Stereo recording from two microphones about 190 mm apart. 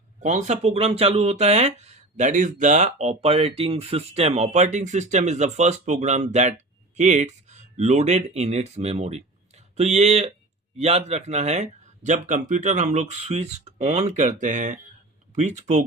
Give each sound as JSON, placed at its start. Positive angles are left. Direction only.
{"t": 0.2, "sound": "speech", "side_deg": -40}